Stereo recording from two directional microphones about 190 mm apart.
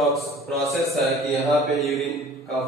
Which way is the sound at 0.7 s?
Centre (ahead or behind).